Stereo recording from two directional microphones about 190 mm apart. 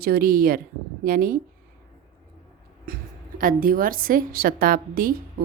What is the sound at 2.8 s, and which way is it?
A woman's voice, 50° right (ahead or behind).